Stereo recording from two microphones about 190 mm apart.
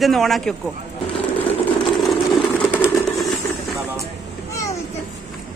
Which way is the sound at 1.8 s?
Centre (ahead or behind).